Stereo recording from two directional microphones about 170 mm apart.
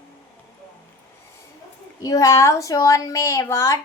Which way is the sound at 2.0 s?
20° left (ahead or behind).